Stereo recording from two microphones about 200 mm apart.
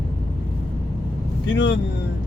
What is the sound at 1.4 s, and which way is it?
Speech, 65° left (ahead or behind).